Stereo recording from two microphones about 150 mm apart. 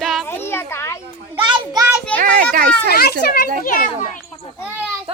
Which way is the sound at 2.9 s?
90° left.